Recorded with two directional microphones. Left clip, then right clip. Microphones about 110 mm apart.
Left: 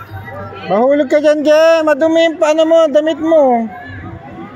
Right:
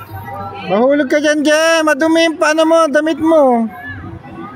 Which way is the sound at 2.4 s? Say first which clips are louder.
Left 1 dB; 90° right.